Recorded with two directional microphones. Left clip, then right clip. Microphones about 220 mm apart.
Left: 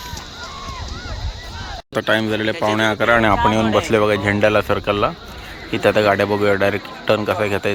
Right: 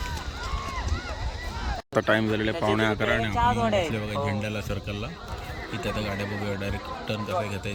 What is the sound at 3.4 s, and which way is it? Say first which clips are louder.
Speech: left 6 dB; 45° right (ahead or behind).